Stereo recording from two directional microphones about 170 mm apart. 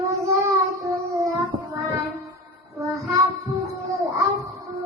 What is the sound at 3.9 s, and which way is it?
Child singing, 20° right (ahead or behind).